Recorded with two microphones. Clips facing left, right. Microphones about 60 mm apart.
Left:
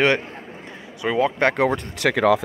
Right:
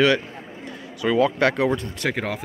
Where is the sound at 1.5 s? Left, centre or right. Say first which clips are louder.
Left 1 dB; left.